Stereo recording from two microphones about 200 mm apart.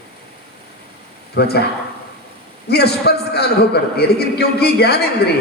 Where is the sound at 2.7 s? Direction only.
55° left (ahead or behind).